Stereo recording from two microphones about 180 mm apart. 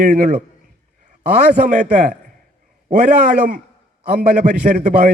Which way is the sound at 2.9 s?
55° right (ahead or behind).